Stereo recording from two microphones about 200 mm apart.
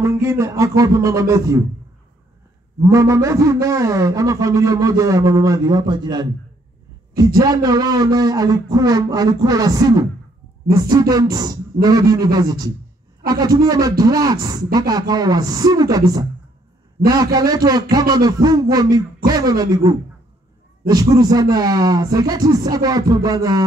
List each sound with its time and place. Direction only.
0.0 s a man's voice: 15° right (ahead or behind)
2.8 s a man's voice: 15° right (ahead or behind)
7.3 s a man's voice: 20° right (ahead or behind)
17.0 s a man's voice: 20° right (ahead or behind)